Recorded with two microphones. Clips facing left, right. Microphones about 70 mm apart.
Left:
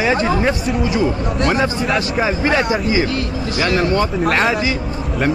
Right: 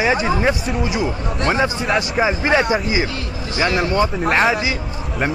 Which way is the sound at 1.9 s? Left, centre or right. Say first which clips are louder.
Even; centre.